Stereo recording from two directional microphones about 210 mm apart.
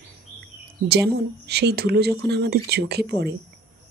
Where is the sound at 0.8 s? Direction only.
50° right (ahead or behind).